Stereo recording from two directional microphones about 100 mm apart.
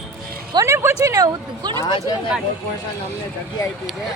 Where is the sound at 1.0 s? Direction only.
40° right (ahead or behind).